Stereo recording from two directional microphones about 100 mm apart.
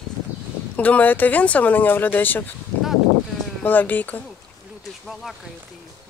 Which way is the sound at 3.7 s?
20° left (ahead or behind).